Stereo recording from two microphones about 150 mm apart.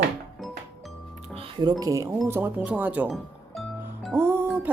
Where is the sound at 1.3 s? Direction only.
35° right (ahead or behind).